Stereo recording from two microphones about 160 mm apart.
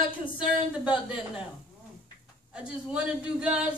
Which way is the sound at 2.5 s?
5° right (ahead or behind).